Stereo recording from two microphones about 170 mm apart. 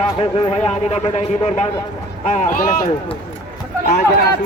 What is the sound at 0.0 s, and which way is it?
A man's voice, 30° left (ahead or behind).